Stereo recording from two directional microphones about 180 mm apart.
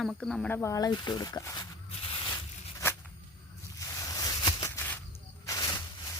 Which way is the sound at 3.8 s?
20° left (ahead or behind).